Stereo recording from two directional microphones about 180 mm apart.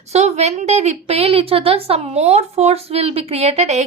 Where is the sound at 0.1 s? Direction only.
40° right (ahead or behind).